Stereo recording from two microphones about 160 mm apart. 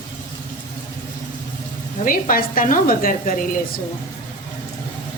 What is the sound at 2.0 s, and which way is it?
Speech, 60° left (ahead or behind).